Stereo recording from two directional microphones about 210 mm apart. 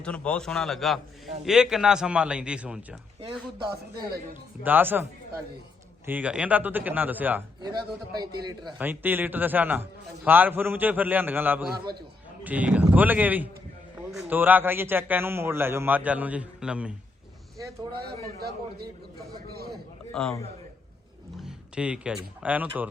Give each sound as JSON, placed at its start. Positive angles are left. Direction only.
{"t": 0.0, "sound": "a man's voice", "side_deg": 5}
{"t": 3.2, "sound": "speech", "side_deg": -20}
{"t": 4.6, "sound": "a man's voice", "side_deg": -10}
{"t": 6.1, "sound": "a man's voice", "side_deg": -5}
{"t": 8.1, "sound": "speech", "side_deg": -20}
{"t": 8.8, "sound": "a man's voice", "side_deg": -10}
{"t": 17.9, "sound": "a man's voice", "side_deg": -50}
{"t": 20.1, "sound": "a man's voice", "side_deg": 0}
{"t": 21.4, "sound": "speech", "side_deg": -5}